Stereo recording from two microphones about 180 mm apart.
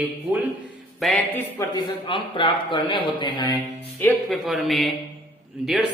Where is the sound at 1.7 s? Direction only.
30° left (ahead or behind).